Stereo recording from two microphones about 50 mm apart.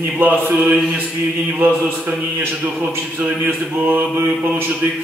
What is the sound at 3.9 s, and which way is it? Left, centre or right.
Mantra, right.